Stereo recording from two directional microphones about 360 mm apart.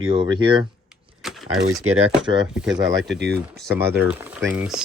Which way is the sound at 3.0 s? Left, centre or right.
Right.